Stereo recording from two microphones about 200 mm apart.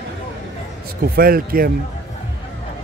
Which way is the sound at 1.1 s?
45° right (ahead or behind).